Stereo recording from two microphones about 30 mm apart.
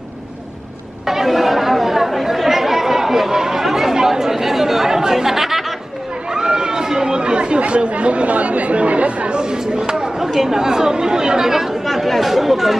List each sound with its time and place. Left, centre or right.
1.0 s chatter: centre
6.3 s chatter: right
9.4 s speech: right
11.8 s speech: centre